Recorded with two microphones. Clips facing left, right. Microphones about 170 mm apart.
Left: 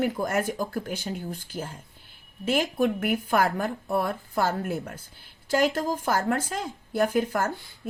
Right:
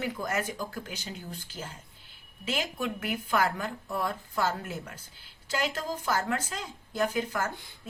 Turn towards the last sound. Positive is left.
turn(degrees=55)  # may be behind; listen again after turning